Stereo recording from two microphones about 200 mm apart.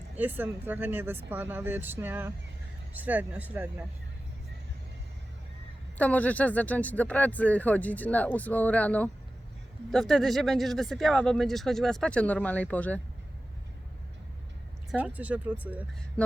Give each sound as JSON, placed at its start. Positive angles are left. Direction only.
{"t": 0.2, "sound": "speech", "side_deg": -10}
{"t": 6.0, "sound": "speech", "side_deg": 5}
{"t": 14.8, "sound": "speech", "side_deg": -5}
{"t": 16.2, "sound": "speech", "side_deg": 5}